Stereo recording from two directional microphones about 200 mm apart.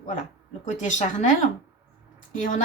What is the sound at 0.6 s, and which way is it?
A woman's voice, 35° left (ahead or behind).